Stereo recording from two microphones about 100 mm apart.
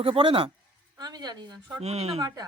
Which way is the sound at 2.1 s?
40° right (ahead or behind).